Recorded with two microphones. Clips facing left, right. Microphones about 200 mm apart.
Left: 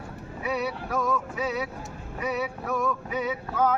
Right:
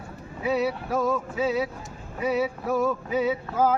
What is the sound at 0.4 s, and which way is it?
Music, 30° right (ahead or behind).